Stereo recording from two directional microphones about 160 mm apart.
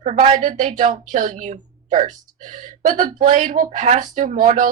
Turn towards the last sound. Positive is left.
turn(degrees=-55)  # may be behind; listen again after turning